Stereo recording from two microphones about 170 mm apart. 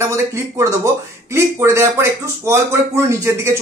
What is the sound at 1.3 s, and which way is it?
Speech, 15° right (ahead or behind).